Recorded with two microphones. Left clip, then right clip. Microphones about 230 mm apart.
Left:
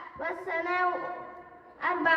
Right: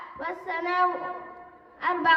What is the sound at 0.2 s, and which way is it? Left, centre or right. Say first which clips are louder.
Child singing: right 1 dB; right.